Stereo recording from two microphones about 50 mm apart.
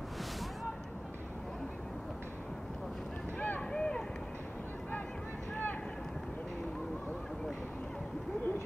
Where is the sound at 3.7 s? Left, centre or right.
Centre.